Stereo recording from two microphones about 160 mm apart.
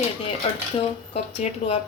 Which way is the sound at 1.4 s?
40° left (ahead or behind).